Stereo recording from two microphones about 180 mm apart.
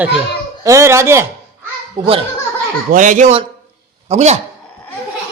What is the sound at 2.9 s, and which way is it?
A man's voice, 45° right (ahead or behind).